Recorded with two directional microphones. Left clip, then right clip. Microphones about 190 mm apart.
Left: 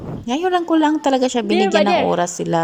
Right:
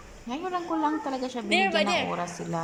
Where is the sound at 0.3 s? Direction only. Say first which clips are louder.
Left 13 dB; 45° left (ahead or behind).